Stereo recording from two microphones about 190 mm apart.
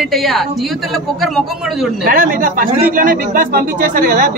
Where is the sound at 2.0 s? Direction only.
50° right (ahead or behind).